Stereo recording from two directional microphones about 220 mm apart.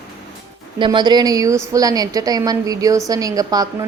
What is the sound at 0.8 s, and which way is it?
A woman's voice, 20° right (ahead or behind).